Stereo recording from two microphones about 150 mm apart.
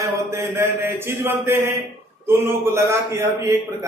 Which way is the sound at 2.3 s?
15° right (ahead or behind).